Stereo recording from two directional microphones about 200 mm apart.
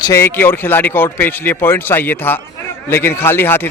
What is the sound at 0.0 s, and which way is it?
Speech, 15° left (ahead or behind).